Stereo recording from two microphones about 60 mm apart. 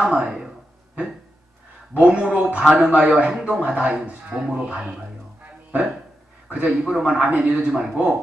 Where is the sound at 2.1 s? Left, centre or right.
Centre.